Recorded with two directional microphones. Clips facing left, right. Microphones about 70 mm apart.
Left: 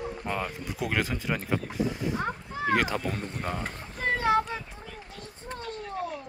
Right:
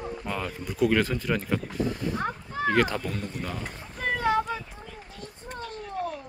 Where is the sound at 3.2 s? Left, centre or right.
Left.